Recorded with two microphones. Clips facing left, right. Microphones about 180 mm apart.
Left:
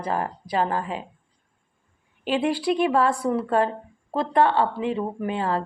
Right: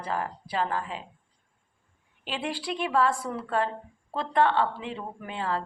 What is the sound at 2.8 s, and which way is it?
Speech, 45° left (ahead or behind).